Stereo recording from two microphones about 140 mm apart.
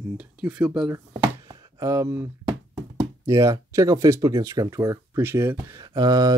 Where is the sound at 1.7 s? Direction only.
25° right (ahead or behind).